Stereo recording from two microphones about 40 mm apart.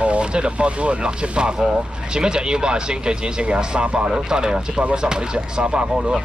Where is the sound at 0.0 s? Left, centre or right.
Right.